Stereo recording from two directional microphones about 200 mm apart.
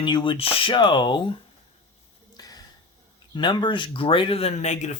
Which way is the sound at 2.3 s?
20° left (ahead or behind).